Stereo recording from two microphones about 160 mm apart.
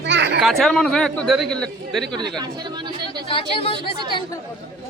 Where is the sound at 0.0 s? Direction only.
90° right.